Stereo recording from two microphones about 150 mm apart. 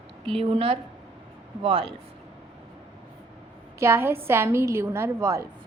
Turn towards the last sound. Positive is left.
turn(degrees=-20)  # may be behind; listen again after turning